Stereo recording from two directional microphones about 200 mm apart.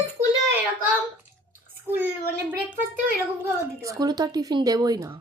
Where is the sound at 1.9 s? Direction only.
10° right (ahead or behind).